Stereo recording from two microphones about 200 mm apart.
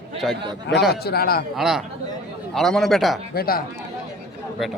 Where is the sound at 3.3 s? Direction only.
50° left (ahead or behind).